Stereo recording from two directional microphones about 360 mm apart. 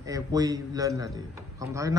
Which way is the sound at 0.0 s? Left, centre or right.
Centre.